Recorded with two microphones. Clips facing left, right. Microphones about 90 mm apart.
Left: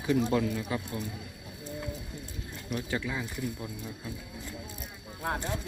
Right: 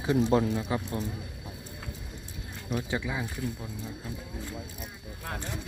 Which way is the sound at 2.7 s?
20° right (ahead or behind).